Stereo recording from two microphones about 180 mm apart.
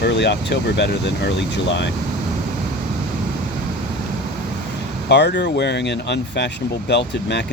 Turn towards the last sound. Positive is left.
turn(degrees=70)  # may be behind; listen again after turning